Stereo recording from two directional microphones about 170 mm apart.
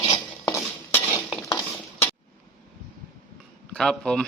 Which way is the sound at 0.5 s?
10° left (ahead or behind).